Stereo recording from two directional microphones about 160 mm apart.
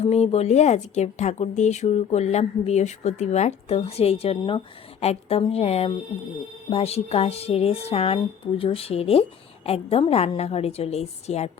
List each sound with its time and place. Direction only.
0.0 s speech: 45° left (ahead or behind)